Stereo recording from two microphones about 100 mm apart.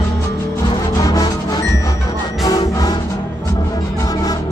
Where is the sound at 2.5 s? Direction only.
40° left (ahead or behind).